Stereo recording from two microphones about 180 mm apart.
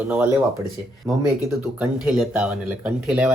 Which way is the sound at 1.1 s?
20° right (ahead or behind).